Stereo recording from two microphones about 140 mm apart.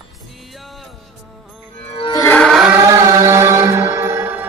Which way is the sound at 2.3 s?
5° left (ahead or behind).